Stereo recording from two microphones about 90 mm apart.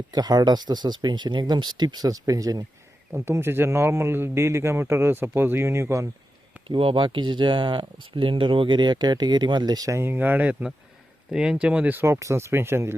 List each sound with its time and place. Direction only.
0.1 s speech: 45° right (ahead or behind)
3.1 s speech: 25° right (ahead or behind)
6.7 s speech: 85° right; by 12.9 s 30° right (ahead or behind)